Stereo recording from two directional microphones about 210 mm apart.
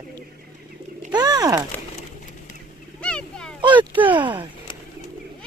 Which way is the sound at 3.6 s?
20° right (ahead or behind).